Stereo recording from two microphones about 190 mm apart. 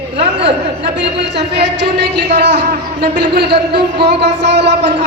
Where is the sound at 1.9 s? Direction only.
65° right (ahead or behind).